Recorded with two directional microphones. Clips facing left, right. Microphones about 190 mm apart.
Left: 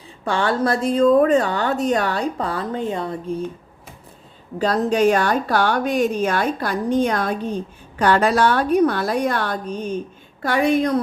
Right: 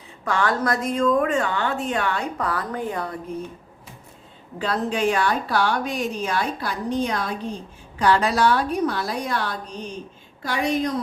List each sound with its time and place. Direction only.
0.3 s a woman's voice: 30° left (ahead or behind)
4.5 s a woman's voice: 40° left (ahead or behind); by 11.0 s 60° left (ahead or behind)